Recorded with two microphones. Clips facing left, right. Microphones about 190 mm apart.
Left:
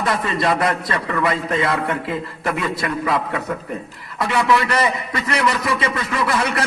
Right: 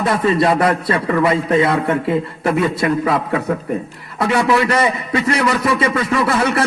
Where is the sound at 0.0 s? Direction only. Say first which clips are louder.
Right 5 dB; 30° right (ahead or behind).